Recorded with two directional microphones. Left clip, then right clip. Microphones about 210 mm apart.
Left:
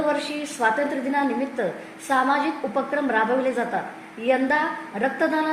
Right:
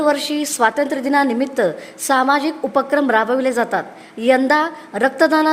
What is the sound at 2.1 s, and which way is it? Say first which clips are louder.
A woman's voice: right 5 dB; 45° right (ahead or behind).